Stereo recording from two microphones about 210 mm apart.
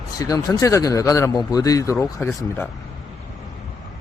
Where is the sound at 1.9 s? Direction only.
Centre (ahead or behind).